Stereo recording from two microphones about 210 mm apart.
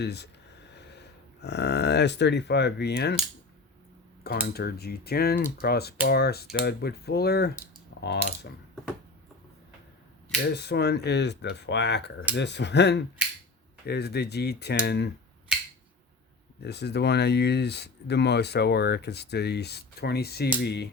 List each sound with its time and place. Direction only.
0.0 s speech: 50° left (ahead or behind)
4.2 s speech: 50° left (ahead or behind)
10.5 s speech: 50° left (ahead or behind)
16.6 s speech: 50° left (ahead or behind)